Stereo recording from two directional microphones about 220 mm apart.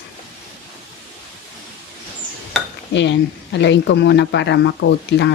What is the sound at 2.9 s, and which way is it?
Speech, 55° left (ahead or behind).